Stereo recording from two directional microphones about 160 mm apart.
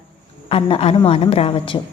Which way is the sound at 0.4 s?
35° left (ahead or behind).